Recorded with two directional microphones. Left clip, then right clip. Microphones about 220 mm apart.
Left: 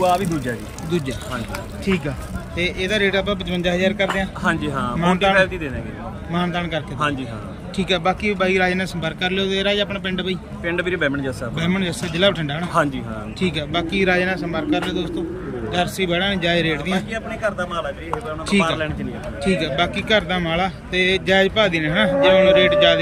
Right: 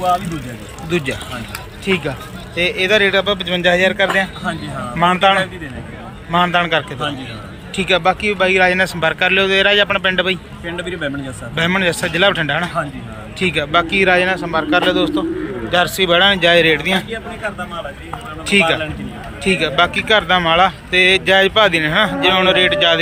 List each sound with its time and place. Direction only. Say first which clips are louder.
0.0 s speech: right 1 dB; 25° left (ahead or behind)
0.9 s speech: right 5 dB; 5° left (ahead or behind)
4.4 s speech: left 2 dB; 25° left (ahead or behind)
4.9 s speech: right 4 dB; 5° left (ahead or behind)
10.7 s speech: left 2 dB; 20° left (ahead or behind)
11.5 s speech: right 12 dB; 5° left (ahead or behind)
18.4 s speech: right 7 dB; 5° left (ahead or behind)